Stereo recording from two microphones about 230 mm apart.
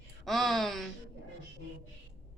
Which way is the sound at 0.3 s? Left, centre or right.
Centre.